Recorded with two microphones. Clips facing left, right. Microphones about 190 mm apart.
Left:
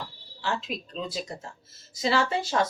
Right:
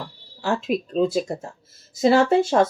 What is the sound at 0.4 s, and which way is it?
Speech, 50° right (ahead or behind).